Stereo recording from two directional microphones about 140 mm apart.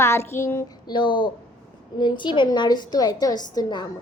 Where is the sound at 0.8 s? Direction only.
35° left (ahead or behind).